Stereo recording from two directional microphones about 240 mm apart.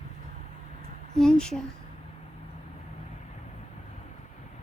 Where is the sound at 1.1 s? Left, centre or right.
Centre.